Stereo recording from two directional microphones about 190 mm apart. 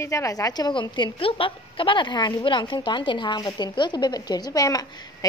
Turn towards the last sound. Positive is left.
turn(degrees=20)  # may be behind; listen again after turning